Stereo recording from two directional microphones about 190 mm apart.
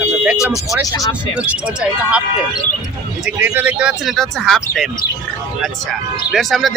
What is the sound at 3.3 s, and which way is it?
Speech, 5° right (ahead or behind).